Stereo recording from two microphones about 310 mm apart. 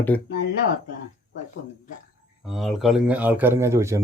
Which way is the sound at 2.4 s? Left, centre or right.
Centre.